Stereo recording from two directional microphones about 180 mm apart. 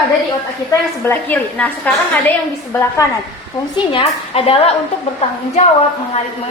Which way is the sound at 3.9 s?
30° left (ahead or behind).